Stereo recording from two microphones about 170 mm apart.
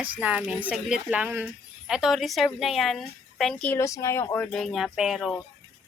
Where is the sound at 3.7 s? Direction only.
20° left (ahead or behind).